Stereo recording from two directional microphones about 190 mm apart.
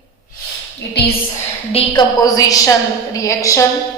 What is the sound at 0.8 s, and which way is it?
Speech, 60° left (ahead or behind).